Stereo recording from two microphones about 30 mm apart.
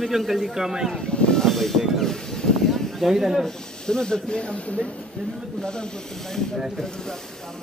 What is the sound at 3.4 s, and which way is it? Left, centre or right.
Speech, left.